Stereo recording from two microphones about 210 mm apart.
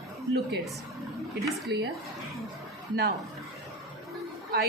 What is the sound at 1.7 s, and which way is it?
Speech, 55° right (ahead or behind).